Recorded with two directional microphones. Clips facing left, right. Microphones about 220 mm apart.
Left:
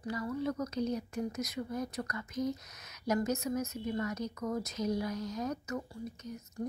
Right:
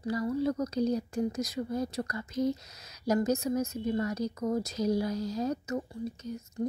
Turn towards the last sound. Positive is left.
turn(degrees=-30)  # may be behind; listen again after turning